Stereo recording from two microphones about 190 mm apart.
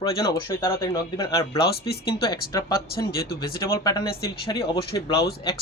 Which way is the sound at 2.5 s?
20° left (ahead or behind).